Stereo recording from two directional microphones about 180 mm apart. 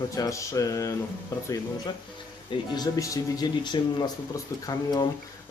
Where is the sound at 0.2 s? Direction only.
20° left (ahead or behind).